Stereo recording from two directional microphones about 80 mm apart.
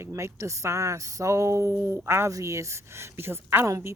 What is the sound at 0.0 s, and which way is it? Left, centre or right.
A woman's voice, right.